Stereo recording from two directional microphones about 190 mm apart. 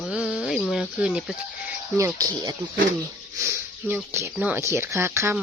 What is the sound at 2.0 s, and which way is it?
Speech, 15° right (ahead or behind).